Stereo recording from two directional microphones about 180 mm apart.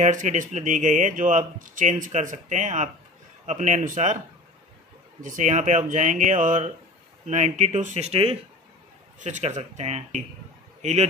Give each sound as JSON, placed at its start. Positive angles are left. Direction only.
{"t": 0.0, "sound": "speech", "side_deg": -45}
{"t": 5.2, "sound": "a man's voice", "side_deg": -45}